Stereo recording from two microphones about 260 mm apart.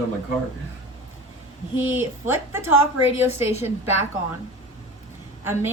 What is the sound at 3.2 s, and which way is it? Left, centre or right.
Speech, left.